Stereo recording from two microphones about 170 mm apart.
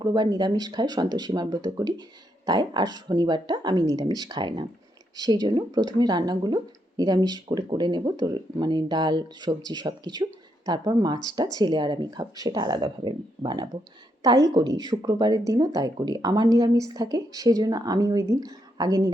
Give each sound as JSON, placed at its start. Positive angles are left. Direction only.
{"t": 0.0, "sound": "speech", "side_deg": -25}